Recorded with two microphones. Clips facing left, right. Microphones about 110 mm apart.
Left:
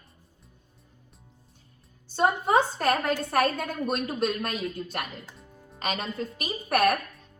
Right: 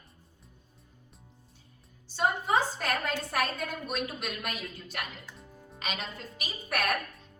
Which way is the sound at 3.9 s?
35° left (ahead or behind).